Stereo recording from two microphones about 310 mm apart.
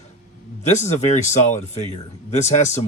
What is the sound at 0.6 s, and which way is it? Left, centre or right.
Speech, left.